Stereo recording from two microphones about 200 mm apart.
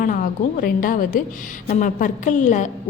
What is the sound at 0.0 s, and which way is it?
A woman's voice, 40° left (ahead or behind).